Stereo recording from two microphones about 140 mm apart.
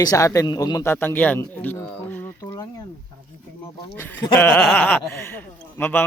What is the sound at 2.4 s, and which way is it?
Speech, 30° left (ahead or behind).